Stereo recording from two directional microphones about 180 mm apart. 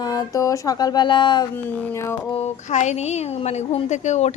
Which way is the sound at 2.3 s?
40° left (ahead or behind).